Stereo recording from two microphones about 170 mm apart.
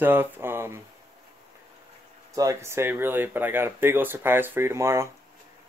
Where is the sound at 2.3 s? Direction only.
20° right (ahead or behind).